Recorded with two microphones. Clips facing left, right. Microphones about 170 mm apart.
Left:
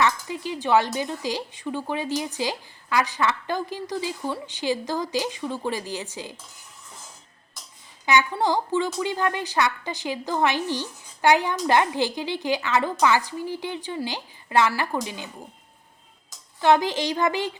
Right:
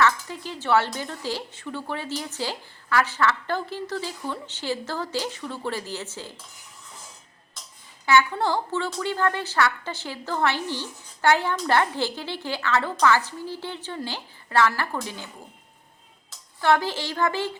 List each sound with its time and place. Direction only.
0.0 s a sound: 15° left (ahead or behind)
0.9 s a woman's voice: 15° left (ahead or behind)
8.0 s a woman's voice: 15° left (ahead or behind)
16.6 s a woman's voice: 20° left (ahead or behind)